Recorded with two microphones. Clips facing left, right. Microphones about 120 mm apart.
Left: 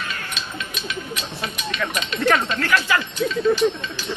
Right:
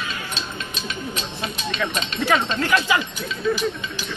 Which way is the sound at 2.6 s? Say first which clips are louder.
Right 1 dB; 15° right (ahead or behind).